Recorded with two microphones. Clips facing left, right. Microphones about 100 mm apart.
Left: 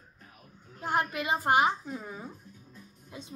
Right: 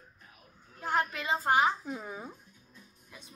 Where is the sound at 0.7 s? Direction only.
15° left (ahead or behind).